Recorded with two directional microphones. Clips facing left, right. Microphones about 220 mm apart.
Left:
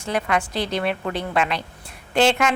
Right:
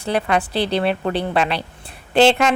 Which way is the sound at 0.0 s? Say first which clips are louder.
Right 3 dB; 30° right (ahead or behind).